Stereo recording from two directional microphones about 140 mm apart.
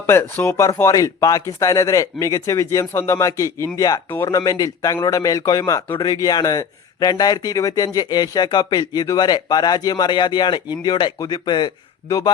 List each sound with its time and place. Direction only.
0.0 s speech: 15° left (ahead or behind)